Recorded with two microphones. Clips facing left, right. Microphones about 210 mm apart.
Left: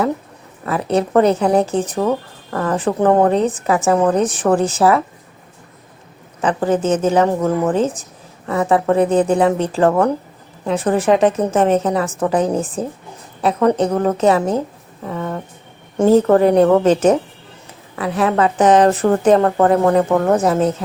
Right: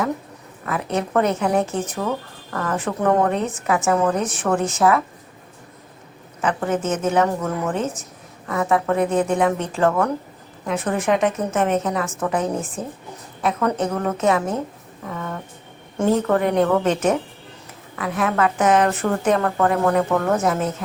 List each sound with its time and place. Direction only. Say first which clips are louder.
0.6 s speech: left 6 dB; 35° left (ahead or behind)
6.4 s speech: left 5 dB; 30° left (ahead or behind)
15.0 s a sound: left 6 dB; 30° left (ahead or behind)
16.0 s speech: left 7 dB; 35° left (ahead or behind)